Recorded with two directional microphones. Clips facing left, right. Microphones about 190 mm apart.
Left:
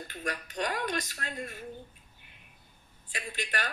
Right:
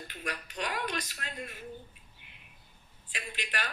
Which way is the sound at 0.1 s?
45° left (ahead or behind).